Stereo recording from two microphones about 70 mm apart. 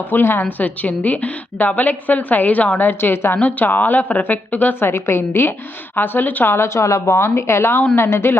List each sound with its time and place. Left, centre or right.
0.0 s a woman's voice: left